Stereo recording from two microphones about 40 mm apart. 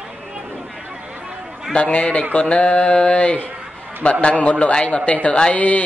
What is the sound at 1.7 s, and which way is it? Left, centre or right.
Speech, left.